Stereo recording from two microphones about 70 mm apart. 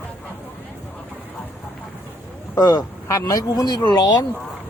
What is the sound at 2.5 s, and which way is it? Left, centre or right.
Speech, left.